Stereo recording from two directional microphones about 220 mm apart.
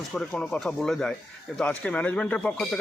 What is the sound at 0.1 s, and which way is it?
Speech, 5° left (ahead or behind).